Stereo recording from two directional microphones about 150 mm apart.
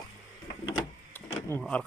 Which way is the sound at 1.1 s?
10° left (ahead or behind).